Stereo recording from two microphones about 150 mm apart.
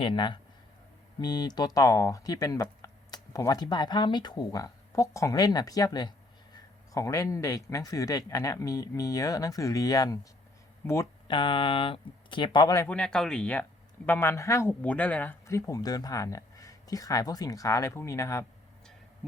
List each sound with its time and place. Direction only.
0.0 s speech: 30° left (ahead or behind)
11.3 s speech: 35° left (ahead or behind)
12.9 s speech: 5° left (ahead or behind); by 18.4 s 20° left (ahead or behind)